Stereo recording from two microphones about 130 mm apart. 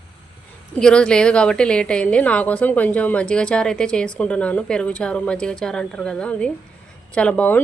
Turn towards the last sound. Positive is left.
turn(degrees=10)  # may be behind; listen again after turning